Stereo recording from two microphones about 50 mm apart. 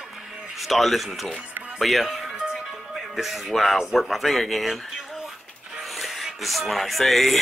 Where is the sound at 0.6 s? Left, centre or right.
Centre.